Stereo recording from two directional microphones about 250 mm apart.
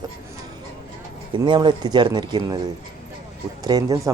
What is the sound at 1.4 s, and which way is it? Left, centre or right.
A man's voice, centre.